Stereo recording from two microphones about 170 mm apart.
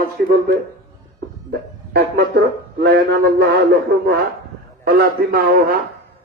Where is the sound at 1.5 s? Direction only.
70° right (ahead or behind).